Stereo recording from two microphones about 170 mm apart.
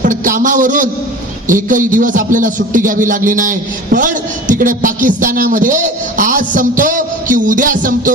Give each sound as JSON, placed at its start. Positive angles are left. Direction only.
{"t": 0.0, "sound": "a man's voice", "side_deg": -50}